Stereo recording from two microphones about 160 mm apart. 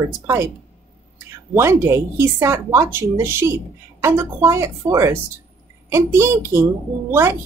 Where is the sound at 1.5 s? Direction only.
15° right (ahead or behind).